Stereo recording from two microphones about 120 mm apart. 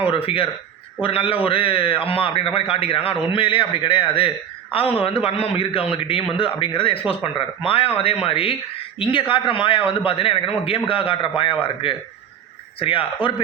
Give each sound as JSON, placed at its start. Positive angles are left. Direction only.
{"t": 0.0, "sound": "a man's voice", "side_deg": 50}